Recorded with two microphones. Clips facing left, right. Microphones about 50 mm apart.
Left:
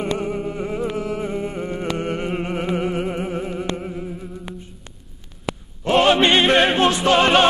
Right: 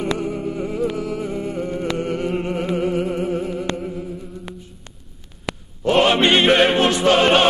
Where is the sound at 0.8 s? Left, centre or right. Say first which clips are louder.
Right 1 dB; left.